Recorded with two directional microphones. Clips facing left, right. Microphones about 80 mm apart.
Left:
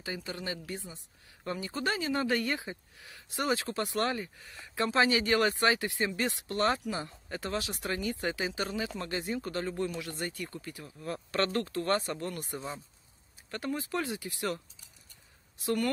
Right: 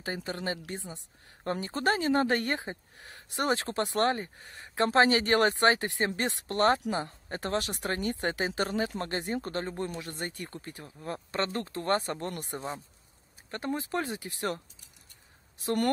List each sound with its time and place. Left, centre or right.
0.0 s speech: right
11.3 s speech: right
13.5 s speech: right
15.6 s speech: right